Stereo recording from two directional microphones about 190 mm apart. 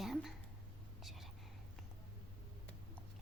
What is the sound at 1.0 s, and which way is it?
Whispering, centre (ahead or behind).